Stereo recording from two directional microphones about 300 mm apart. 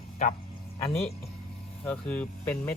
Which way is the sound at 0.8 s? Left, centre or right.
Centre.